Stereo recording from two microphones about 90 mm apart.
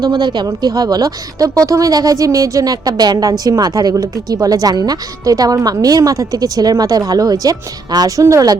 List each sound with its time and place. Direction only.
0.0 s speech: 50° right (ahead or behind)